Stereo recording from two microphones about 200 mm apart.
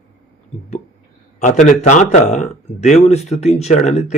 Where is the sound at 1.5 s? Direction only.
35° left (ahead or behind).